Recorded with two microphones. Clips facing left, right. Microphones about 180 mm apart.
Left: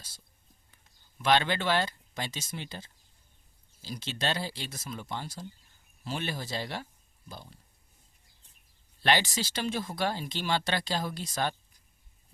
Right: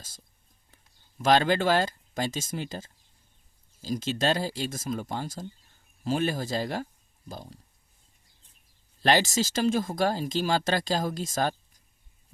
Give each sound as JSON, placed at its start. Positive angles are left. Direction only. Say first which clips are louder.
{"t": 1.2, "sound": "speech", "louder": "right 4 dB", "side_deg": -45}
{"t": 9.0, "sound": "speech", "louder": "right 4 dB", "side_deg": -40}